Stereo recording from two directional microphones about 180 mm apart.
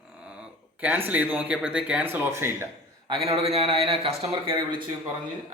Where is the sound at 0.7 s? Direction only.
10° right (ahead or behind).